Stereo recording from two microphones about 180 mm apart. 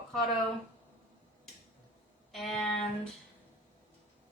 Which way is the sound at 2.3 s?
Centre (ahead or behind).